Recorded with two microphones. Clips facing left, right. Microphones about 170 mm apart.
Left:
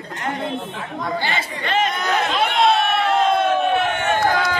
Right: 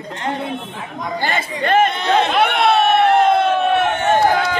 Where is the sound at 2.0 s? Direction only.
30° right (ahead or behind).